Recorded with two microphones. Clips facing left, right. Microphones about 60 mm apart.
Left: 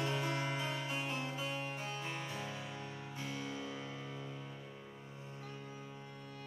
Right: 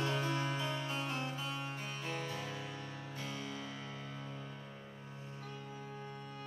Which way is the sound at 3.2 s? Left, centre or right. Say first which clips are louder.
Left 1 dB; left.